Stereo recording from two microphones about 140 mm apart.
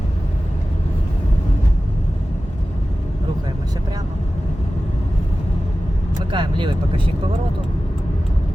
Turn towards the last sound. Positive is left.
turn(degrees=-35)  # may be behind; listen again after turning